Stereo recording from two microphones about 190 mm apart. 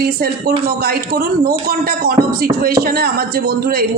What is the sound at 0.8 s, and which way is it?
Speech, 50° right (ahead or behind).